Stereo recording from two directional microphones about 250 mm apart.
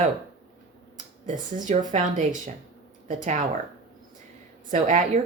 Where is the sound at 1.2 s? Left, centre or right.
Right.